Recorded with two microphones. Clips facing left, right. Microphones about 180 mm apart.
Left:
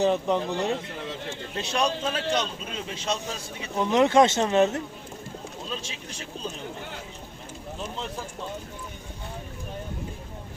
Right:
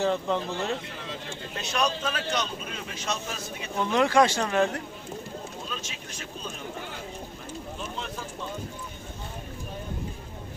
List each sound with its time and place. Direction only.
0.0 s speech: 15° left (ahead or behind)
1.5 s speech: 30° left (ahead or behind)
3.8 s speech: 20° left (ahead or behind)
5.6 s speech: 30° left (ahead or behind)